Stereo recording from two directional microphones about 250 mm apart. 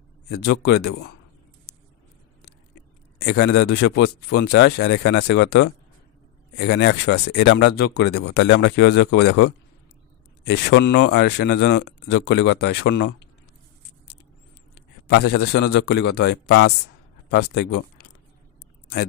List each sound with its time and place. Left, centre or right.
0.5 s speech: left
2.7 s speech: left
15.0 s speech: left